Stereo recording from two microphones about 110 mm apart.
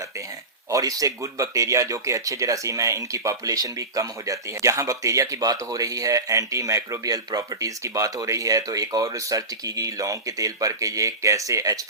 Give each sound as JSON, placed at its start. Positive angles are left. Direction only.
{"t": 0.7, "sound": "speech", "side_deg": -30}